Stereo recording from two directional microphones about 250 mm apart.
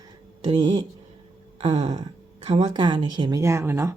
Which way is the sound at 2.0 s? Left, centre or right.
Centre.